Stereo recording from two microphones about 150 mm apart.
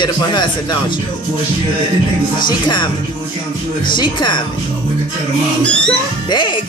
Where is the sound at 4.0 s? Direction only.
30° left (ahead or behind).